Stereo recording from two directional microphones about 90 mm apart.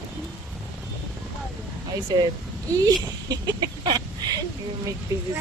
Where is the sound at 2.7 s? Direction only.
45° right (ahead or behind).